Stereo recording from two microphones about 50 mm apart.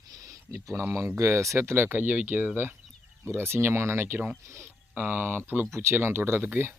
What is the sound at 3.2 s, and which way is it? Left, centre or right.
Speech, right.